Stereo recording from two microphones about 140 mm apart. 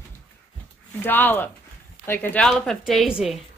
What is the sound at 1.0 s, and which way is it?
A woman's voice, 15° left (ahead or behind).